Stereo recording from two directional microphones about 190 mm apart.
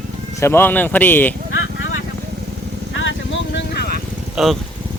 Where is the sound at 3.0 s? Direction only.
75° left (ahead or behind); by 4.0 s 55° left (ahead or behind).